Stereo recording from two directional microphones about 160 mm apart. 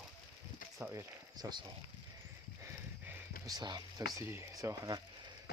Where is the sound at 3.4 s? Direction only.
25° right (ahead or behind).